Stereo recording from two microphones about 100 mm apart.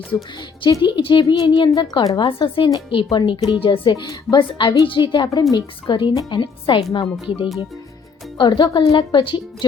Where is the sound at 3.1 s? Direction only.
50° left (ahead or behind).